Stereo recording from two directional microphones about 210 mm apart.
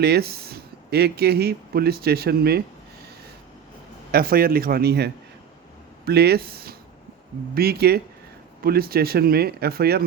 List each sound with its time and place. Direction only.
0.0 s speech: 50° right (ahead or behind)
4.1 s speech: 45° right (ahead or behind)